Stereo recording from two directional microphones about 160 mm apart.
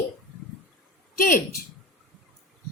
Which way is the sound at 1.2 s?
60° left (ahead or behind).